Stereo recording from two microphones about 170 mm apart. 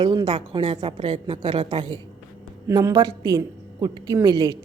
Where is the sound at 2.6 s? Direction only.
20° right (ahead or behind).